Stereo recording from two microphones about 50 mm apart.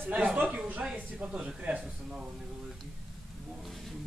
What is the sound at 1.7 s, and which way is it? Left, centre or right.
Speech, right.